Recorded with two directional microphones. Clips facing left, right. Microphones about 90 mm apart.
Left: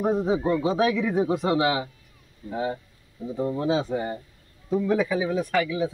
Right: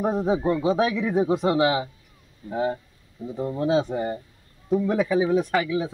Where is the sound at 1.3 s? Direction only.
20° right (ahead or behind).